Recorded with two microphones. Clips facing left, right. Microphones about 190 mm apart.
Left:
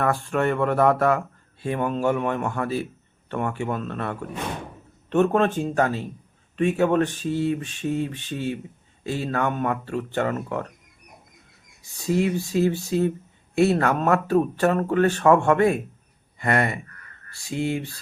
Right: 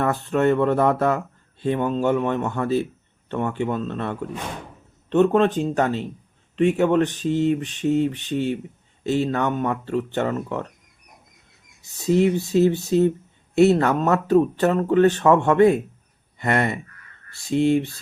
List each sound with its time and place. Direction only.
0.0 s speech: 25° right (ahead or behind)
12.0 s speech: 20° right (ahead or behind)